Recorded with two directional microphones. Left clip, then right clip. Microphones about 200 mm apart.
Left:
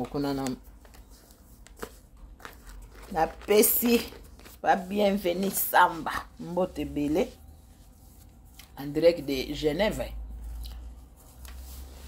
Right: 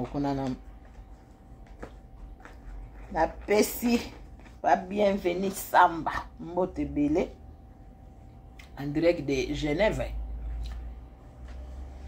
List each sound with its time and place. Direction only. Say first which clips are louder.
0.1 s a woman's voice: right 2 dB; 55° left (ahead or behind)
3.1 s a woman's voice: left 1 dB; 55° left (ahead or behind)
8.5 s speech: left 1 dB; 50° left (ahead or behind)